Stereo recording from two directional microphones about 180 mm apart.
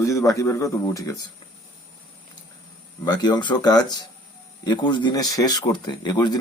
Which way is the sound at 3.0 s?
25° left (ahead or behind).